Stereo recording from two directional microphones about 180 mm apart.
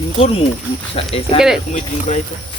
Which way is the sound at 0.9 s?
30° left (ahead or behind).